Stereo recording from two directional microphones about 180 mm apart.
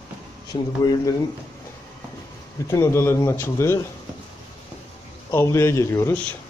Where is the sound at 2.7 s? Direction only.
15° left (ahead or behind).